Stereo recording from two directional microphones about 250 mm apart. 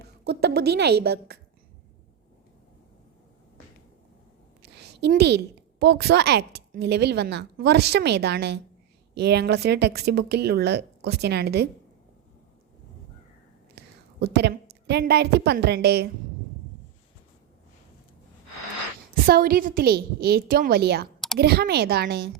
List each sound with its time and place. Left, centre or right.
0.0 s a woman's voice: right
4.6 s a sound: right
5.8 s a woman's voice: right
13.7 s a woman's voice: right
19.1 s a woman's voice: right